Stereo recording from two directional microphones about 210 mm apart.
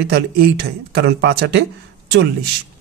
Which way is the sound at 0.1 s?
55° right (ahead or behind).